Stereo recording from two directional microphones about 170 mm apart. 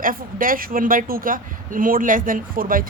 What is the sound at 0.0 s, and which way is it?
Speech, 55° right (ahead or behind).